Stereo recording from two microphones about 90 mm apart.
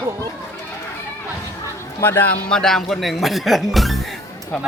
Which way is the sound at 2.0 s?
25° left (ahead or behind).